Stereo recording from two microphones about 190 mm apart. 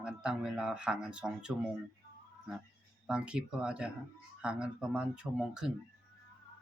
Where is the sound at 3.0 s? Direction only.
5° right (ahead or behind).